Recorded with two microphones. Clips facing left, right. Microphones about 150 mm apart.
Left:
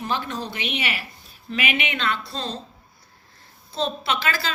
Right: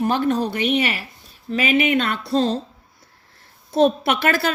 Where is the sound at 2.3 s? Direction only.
70° right (ahead or behind).